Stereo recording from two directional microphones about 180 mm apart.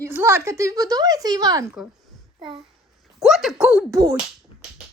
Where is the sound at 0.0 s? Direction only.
15° right (ahead or behind).